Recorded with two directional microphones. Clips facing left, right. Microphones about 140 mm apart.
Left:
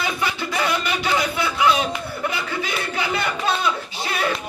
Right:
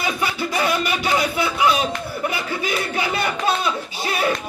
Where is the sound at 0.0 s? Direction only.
15° right (ahead or behind).